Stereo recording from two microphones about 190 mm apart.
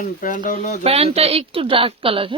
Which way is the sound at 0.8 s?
30° right (ahead or behind).